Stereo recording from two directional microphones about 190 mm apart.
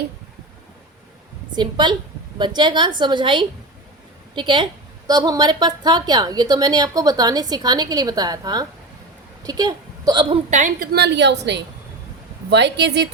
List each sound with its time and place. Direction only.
1.5 s a woman's voice: 25° right (ahead or behind)
10.5 s a woman's voice: 40° right (ahead or behind)
10.9 s a woman's voice: 65° right (ahead or behind)